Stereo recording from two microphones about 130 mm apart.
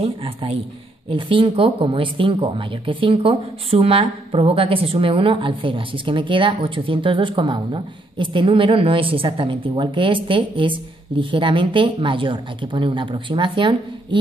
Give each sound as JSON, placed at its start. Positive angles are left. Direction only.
{"t": 0.0, "sound": "a man's voice", "side_deg": -45}